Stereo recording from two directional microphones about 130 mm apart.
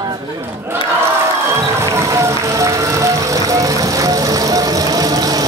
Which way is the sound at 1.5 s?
20° right (ahead or behind).